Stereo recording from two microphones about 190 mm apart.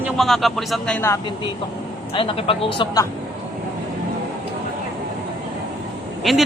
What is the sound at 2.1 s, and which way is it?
Speech, 30° left (ahead or behind).